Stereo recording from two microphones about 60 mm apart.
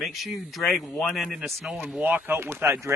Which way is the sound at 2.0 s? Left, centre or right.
Right.